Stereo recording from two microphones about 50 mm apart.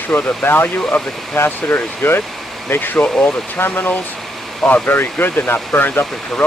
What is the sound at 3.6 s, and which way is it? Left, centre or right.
Speech, left.